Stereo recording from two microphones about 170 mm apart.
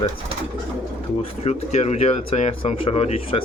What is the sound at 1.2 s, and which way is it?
A man's voice, 40° left (ahead or behind).